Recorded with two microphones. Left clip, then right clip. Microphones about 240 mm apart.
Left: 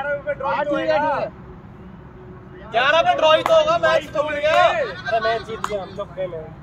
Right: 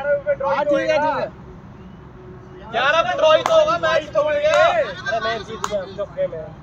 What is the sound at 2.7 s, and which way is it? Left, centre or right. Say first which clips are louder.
Speech: left 1 dB; left.